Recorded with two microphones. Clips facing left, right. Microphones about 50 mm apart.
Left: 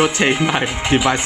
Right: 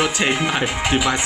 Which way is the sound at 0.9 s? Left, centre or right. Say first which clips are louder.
Left 5 dB; left.